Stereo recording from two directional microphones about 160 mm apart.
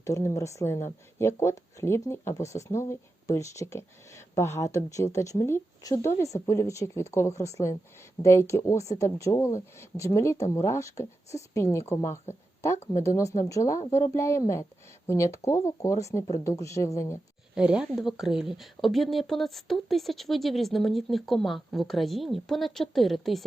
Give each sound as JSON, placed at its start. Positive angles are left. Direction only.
{"t": 0.0, "sound": "speech", "side_deg": 20}
{"t": 17.5, "sound": "speech", "side_deg": -5}